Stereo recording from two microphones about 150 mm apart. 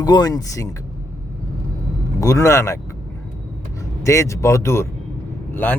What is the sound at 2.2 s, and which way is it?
Speech, 20° left (ahead or behind).